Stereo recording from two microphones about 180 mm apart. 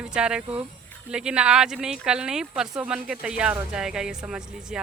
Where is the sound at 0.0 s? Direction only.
5° right (ahead or behind).